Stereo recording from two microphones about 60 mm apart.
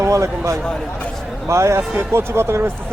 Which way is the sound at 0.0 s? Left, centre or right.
Right.